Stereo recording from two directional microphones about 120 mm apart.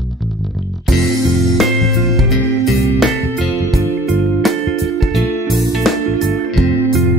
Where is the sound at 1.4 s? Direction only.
Centre (ahead or behind).